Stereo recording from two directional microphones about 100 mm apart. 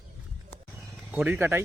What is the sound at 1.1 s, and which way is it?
Speech, 10° right (ahead or behind).